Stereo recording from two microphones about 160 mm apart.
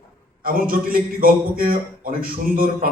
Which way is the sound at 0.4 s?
60° right (ahead or behind).